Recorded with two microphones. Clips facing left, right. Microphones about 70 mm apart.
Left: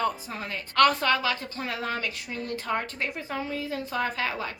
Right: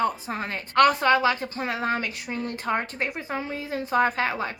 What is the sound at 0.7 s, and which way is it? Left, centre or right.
A woman's voice, right.